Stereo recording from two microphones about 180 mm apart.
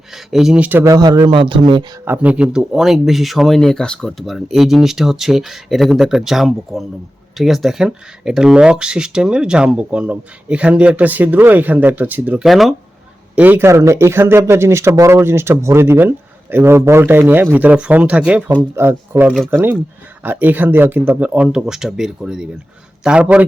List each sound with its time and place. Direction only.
0.1 s speech: centre (ahead or behind); by 1.8 s 30° right (ahead or behind)
2.0 s speech: 5° right (ahead or behind)